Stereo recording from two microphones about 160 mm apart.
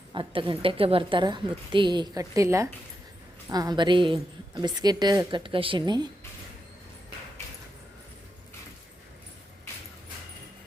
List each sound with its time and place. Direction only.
0.1 s a woman's voice: 30° right (ahead or behind)